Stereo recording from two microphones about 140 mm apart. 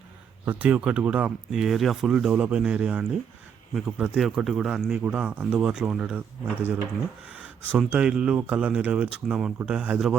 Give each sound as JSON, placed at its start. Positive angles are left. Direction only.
{"t": 0.4, "sound": "speech", "side_deg": -10}